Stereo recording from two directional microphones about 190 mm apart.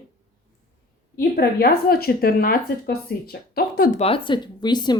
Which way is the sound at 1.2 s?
55° left (ahead or behind).